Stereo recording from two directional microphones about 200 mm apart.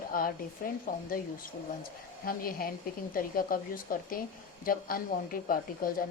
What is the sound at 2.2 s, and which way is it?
A woman's voice, 45° left (ahead or behind).